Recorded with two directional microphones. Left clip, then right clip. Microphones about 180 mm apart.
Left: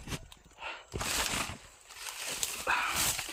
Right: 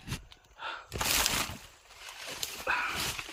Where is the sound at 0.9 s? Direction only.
65° right (ahead or behind).